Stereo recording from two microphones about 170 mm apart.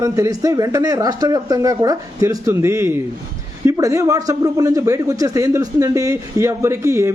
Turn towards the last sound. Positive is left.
turn(degrees=-15)  # may be behind; listen again after turning